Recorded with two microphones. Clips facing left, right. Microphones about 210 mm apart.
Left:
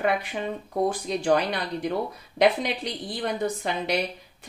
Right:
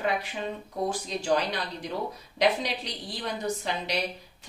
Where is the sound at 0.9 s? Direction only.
55° left (ahead or behind).